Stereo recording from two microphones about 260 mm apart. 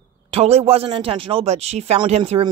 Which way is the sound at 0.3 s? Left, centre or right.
Right.